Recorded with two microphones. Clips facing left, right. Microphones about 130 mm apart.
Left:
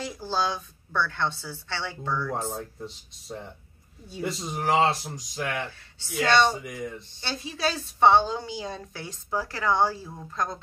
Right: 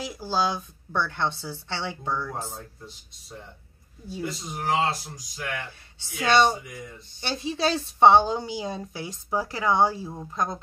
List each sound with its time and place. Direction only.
0.0 s a woman's voice: 10° right (ahead or behind)
4.2 s speech: 75° left (ahead or behind)
5.9 s a woman's voice: 15° right (ahead or behind)